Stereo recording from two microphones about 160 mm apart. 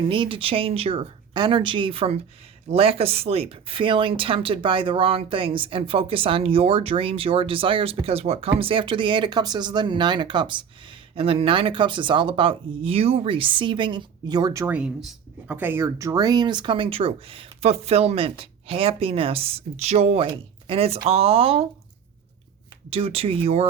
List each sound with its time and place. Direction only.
0.0 s speech: 30° right (ahead or behind)
14.7 s speech: 5° right (ahead or behind); by 21.7 s 35° right (ahead or behind)
22.9 s speech: 35° right (ahead or behind)